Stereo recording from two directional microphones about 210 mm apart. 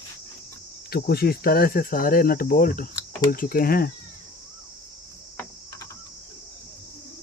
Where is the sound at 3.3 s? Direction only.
45° left (ahead or behind).